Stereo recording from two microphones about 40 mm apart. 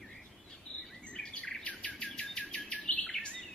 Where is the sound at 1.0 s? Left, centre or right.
Left.